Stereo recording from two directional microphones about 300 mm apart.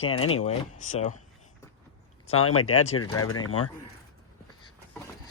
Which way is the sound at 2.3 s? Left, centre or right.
Left.